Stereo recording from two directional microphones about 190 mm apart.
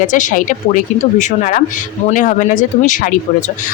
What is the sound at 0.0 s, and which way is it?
Speech, 40° left (ahead or behind).